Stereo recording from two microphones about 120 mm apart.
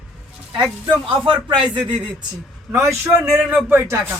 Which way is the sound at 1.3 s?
45° right (ahead or behind).